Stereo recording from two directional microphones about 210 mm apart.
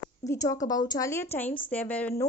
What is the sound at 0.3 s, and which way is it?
A woman's voice, 15° left (ahead or behind).